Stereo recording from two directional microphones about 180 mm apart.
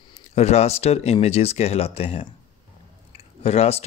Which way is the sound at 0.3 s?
35° left (ahead or behind).